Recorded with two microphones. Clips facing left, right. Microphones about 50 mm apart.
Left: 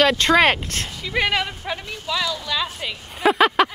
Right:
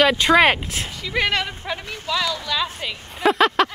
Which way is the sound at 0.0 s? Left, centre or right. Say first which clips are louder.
Right 1 dB; centre.